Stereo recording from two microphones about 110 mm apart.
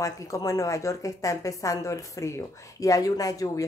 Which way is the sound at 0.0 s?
30° left (ahead or behind).